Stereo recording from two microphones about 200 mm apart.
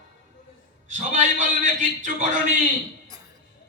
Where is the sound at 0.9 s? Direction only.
40° right (ahead or behind).